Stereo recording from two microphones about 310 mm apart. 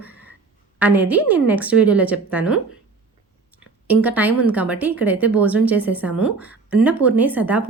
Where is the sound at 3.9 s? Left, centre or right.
Centre.